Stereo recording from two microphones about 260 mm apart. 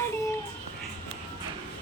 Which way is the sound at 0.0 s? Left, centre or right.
Centre.